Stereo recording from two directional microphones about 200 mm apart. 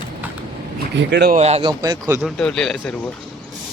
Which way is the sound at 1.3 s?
30° right (ahead or behind).